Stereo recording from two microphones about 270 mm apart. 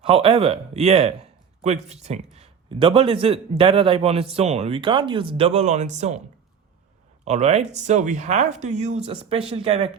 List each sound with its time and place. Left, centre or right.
0.0 s a man's voice: right
7.3 s speech: right